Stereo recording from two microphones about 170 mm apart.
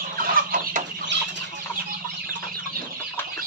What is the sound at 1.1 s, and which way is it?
Chicken, 90° right.